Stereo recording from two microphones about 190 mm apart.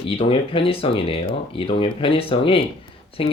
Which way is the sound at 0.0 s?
30° left (ahead or behind).